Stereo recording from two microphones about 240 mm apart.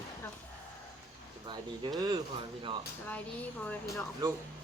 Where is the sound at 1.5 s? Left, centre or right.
Centre.